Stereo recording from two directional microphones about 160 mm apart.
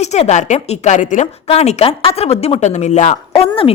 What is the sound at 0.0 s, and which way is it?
A woman's voice, 45° left (ahead or behind).